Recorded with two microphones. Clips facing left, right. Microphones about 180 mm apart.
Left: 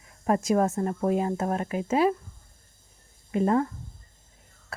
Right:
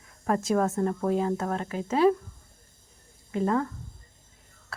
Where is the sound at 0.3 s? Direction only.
20° left (ahead or behind).